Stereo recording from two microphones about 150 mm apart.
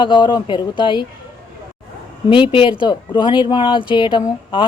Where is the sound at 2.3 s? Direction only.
35° left (ahead or behind).